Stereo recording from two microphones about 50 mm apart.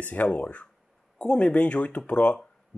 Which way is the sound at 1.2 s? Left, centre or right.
Centre.